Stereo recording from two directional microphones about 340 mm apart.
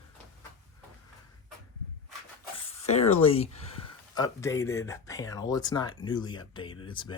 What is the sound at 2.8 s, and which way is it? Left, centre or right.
Speech, centre.